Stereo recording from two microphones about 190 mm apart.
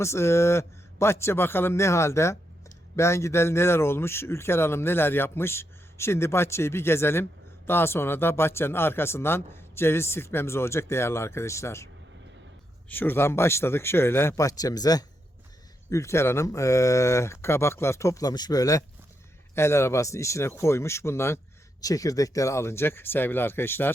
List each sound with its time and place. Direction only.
0.0 s a man's voice: 15° left (ahead or behind)
12.9 s a man's voice: 10° left (ahead or behind)